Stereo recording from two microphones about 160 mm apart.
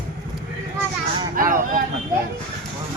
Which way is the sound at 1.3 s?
60° right (ahead or behind).